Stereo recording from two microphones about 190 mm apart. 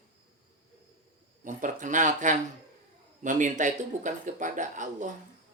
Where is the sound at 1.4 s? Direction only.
45° right (ahead or behind).